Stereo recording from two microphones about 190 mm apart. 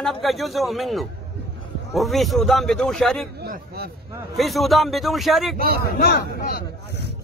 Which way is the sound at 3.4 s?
55° right (ahead or behind).